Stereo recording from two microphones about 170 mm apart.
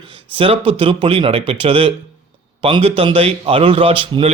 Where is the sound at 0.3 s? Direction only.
35° right (ahead or behind).